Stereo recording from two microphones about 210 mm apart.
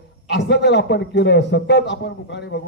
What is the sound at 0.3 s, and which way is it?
A man's voice, 55° left (ahead or behind).